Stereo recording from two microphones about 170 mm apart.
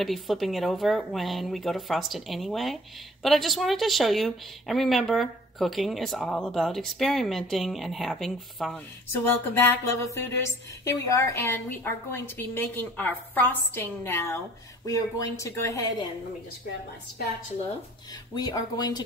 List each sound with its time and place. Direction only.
0.0 s speech: centre (ahead or behind)
9.2 s a woman's voice: 15° left (ahead or behind)
18.3 s speech: 25° left (ahead or behind)